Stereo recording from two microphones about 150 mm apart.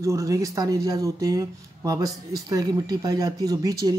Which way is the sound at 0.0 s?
20° right (ahead or behind).